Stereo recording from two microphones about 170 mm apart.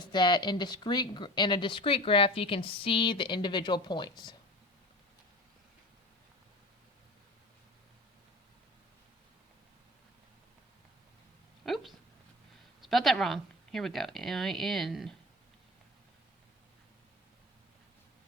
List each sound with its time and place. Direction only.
0.0 s speech: 25° left (ahead or behind)
11.6 s a sound: centre (ahead or behind)
12.8 s speech: centre (ahead or behind)